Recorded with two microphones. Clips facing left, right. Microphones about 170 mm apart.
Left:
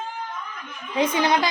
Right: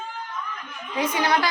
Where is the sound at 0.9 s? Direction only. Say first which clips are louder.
Left 2 dB; 20° left (ahead or behind).